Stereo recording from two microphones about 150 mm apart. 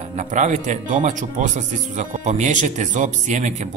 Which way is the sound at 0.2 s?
55° right (ahead or behind).